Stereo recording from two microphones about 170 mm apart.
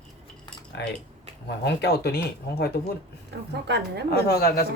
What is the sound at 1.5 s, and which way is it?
Speech, 75° left (ahead or behind).